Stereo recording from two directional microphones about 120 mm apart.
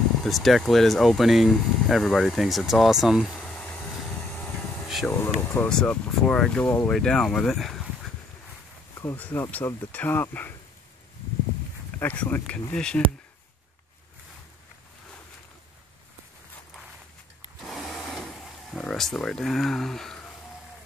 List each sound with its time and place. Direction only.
0.2 s speech: centre (ahead or behind)
3.3 s vehicle: 10° left (ahead or behind)
4.8 s air conditioning: centre (ahead or behind)
5.5 s speech: 10° left (ahead or behind)
6.9 s speech: 5° left (ahead or behind)
9.0 s speech: 15° left (ahead or behind)
12.0 s speech: 15° left (ahead or behind)
17.6 s a sound: centre (ahead or behind)